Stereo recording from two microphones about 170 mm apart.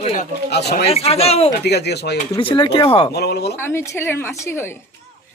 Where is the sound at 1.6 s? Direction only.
75° left (ahead or behind).